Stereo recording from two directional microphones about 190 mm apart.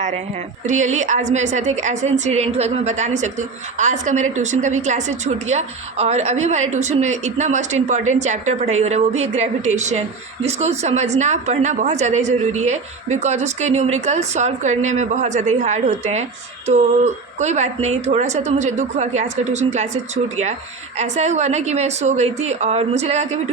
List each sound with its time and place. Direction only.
0.6 s a woman's voice: 40° right (ahead or behind)
17.4 s a woman's voice: 35° right (ahead or behind)